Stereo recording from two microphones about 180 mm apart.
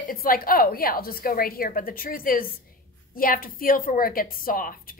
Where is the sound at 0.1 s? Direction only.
55° left (ahead or behind).